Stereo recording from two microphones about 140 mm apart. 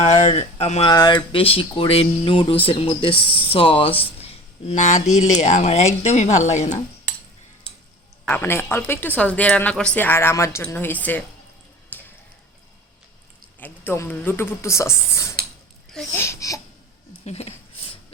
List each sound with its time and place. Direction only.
0.0 s speech: 45° left (ahead or behind)
0.9 s speech: 30° left (ahead or behind)
4.7 s speech: 60° left (ahead or behind)
8.3 s speech: 15° left (ahead or behind)
11.9 s a sound: 15° left (ahead or behind)
13.6 s a woman's voice: 15° left (ahead or behind)
17.2 s speech: 50° left (ahead or behind)